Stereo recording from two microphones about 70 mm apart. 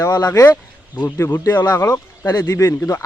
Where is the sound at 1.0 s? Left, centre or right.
Left.